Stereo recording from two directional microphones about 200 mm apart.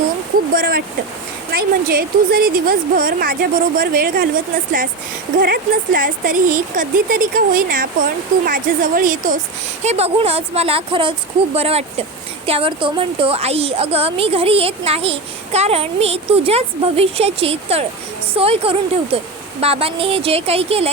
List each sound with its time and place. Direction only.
0.5 s a woman's voice: 45° right (ahead or behind)
9.8 s a woman's voice: 30° right (ahead or behind)